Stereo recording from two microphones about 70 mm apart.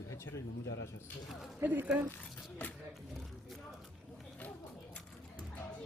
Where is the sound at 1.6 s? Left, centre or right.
Right.